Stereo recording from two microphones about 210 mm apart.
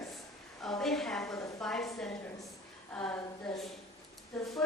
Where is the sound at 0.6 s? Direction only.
Centre (ahead or behind).